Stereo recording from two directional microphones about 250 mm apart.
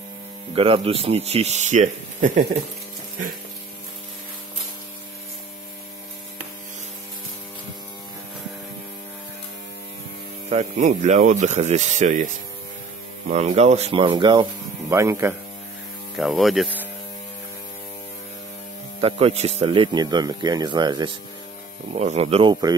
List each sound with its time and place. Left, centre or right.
0.6 s speech: right
10.5 s speech: right
13.3 s speech: right; by 15.3 s centre
16.2 s speech: centre
18.9 s speech: right